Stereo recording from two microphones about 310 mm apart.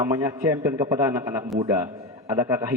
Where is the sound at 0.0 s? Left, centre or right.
Centre.